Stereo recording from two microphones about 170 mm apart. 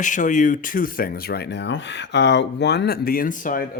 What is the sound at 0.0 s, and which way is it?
Speech, 50° left (ahead or behind).